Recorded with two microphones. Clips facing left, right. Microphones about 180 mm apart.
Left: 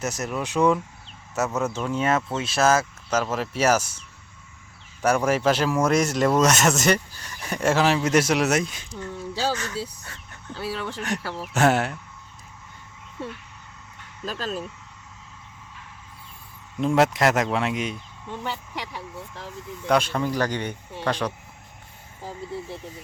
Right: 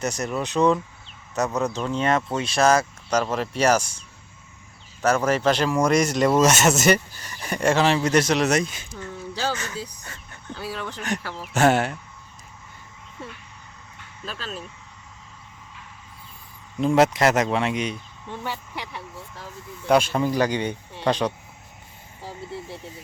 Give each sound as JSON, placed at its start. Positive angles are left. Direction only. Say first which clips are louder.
{"t": 0.0, "sound": "speech", "louder": "right 2 dB", "side_deg": 5}
{"t": 5.0, "sound": "speech", "louder": "even", "side_deg": 10}
{"t": 10.5, "sound": "speech", "louder": "left 2 dB", "side_deg": 30}
{"t": 11.3, "sound": "speech", "louder": "right 1 dB", "side_deg": 5}
{"t": 14.3, "sound": "speech", "louder": "left 5 dB", "side_deg": 40}
{"t": 16.8, "sound": "speech", "louder": "right 2 dB", "side_deg": 0}
{"t": 19.9, "sound": "speech", "louder": "right 3 dB", "side_deg": -10}